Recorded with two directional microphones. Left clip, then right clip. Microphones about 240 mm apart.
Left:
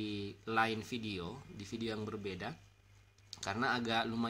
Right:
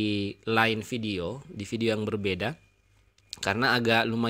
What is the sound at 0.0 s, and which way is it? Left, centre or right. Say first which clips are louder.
A man's voice: right 12 dB; right.